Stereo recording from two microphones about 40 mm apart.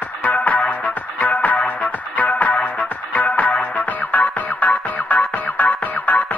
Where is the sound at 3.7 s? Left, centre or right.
Left.